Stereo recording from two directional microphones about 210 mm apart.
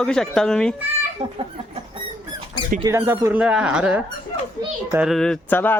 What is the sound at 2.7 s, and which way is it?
Speech, 15° right (ahead or behind).